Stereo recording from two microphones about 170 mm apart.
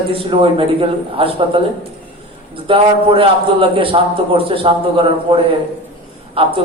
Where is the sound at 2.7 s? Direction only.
30° right (ahead or behind).